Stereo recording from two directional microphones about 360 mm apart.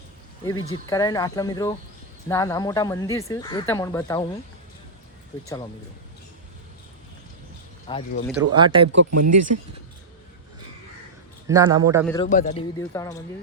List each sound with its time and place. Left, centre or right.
0.4 s speech: centre
7.9 s speech: centre
8.5 s a man's voice: centre
9.0 s speech: right
11.4 s a man's voice: centre
12.0 s a man's voice: centre
12.8 s speech: centre